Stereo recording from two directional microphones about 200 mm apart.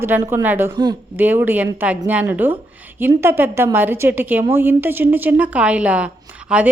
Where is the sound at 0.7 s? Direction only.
20° right (ahead or behind).